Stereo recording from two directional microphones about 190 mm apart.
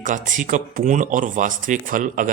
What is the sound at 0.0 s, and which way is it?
Speech, 45° right (ahead or behind).